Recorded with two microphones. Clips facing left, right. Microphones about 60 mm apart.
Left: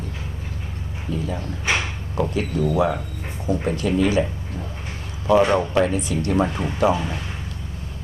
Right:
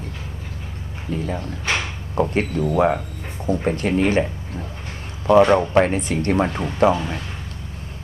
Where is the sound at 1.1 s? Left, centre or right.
Right.